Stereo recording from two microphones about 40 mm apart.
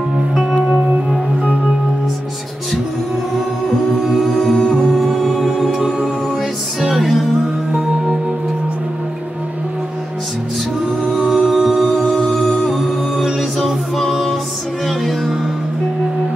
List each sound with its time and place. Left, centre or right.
0.4 s music: centre
3.3 s music: centre
11.1 s music: centre
11.7 s music: centre